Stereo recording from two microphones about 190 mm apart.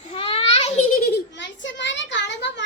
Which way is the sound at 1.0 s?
60° left (ahead or behind).